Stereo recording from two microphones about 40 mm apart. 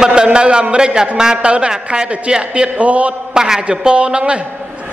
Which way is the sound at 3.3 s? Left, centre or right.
Centre.